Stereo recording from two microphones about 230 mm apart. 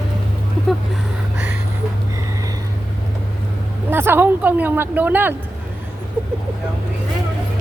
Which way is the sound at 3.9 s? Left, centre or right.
Centre.